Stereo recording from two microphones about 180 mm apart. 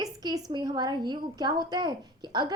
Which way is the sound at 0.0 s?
20° right (ahead or behind).